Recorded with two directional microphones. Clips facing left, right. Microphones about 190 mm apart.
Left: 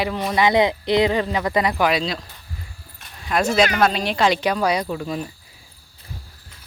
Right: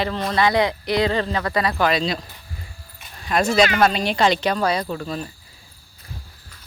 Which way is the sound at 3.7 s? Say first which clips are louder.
Right 1 dB; centre (ahead or behind).